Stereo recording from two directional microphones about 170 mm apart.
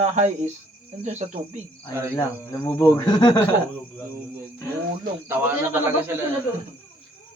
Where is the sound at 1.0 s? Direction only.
40° right (ahead or behind).